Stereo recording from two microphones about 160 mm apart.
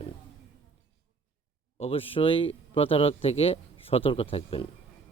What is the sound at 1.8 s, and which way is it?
A man's voice, 35° left (ahead or behind).